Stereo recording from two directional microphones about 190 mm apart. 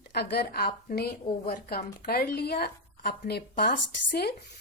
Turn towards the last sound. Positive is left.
turn(degrees=55)  # may be behind; listen again after turning